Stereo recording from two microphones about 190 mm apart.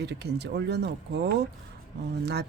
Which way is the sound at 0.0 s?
60° right (ahead or behind).